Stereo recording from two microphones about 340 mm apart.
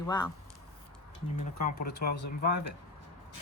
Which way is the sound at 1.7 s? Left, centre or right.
Left.